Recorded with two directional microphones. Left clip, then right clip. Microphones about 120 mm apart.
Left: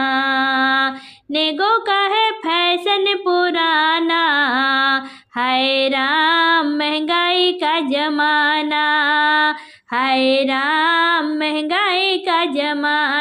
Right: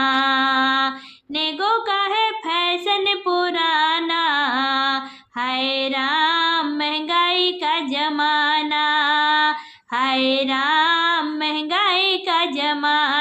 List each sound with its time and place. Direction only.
0.0 s music: 20° left (ahead or behind)